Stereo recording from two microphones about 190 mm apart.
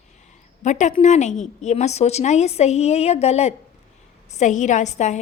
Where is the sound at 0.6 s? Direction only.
40° left (ahead or behind).